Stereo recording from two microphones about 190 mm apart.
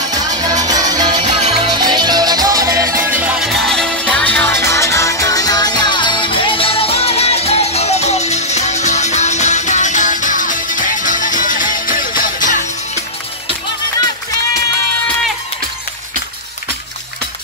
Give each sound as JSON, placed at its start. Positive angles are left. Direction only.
{"t": 0.4, "sound": "music", "side_deg": -20}
{"t": 1.2, "sound": "music", "side_deg": -35}